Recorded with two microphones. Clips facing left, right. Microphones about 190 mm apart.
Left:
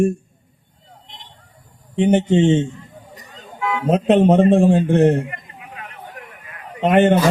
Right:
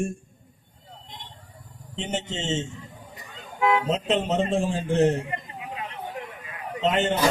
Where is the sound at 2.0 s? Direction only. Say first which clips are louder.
Left 16 dB; 60° left (ahead or behind).